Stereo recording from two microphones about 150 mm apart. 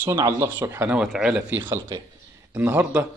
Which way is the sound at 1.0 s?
5° right (ahead or behind).